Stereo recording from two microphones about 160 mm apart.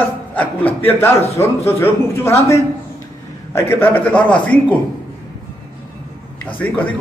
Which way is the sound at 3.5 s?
15° left (ahead or behind).